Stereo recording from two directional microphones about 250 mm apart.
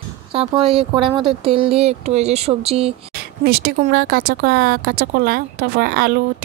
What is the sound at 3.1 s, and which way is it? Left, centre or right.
Speech, right.